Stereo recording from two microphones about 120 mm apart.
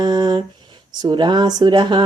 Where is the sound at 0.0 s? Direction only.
35° right (ahead or behind).